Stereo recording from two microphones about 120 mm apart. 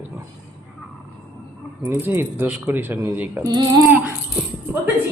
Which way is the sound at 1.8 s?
20° right (ahead or behind).